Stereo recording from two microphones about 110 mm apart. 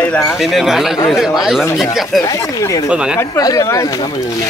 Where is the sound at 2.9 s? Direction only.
10° right (ahead or behind).